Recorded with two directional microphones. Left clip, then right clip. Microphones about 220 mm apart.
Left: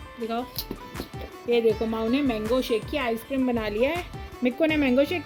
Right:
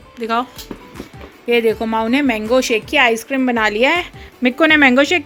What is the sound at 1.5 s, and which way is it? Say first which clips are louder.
Speech: right 7 dB; 30° right (ahead or behind).